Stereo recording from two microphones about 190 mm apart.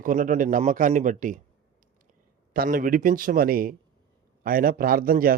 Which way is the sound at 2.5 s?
45° right (ahead or behind).